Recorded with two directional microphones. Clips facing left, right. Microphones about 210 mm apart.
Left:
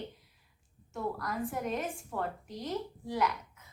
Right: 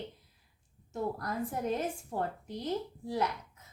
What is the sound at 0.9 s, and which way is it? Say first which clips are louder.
A woman's voice: right 1 dB; 35° right (ahead or behind).